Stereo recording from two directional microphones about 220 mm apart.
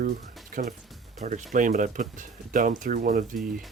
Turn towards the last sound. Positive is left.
turn(degrees=-40)  # may be behind; listen again after turning